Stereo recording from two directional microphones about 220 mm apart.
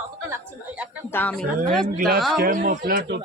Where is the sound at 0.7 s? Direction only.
5° right (ahead or behind).